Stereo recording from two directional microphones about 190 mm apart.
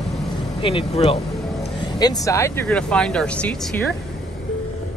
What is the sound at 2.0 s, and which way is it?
Speech, 15° left (ahead or behind).